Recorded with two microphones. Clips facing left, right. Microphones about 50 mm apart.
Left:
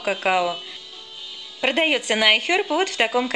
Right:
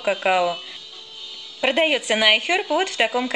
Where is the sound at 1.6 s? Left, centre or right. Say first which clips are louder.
Right 1 dB; centre.